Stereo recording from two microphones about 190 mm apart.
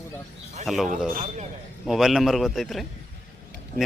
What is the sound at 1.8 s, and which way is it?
A man's voice, centre (ahead or behind).